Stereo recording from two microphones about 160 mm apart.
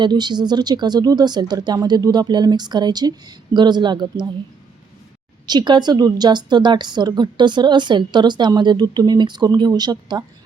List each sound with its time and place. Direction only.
0.0 s a woman's voice: 25° right (ahead or behind)
5.5 s a woman's voice: 30° right (ahead or behind)